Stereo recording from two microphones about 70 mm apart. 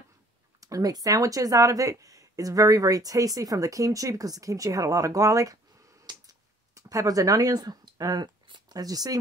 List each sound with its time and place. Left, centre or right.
0.6 s speech: right
6.1 s a sound: right
6.7 s speech: right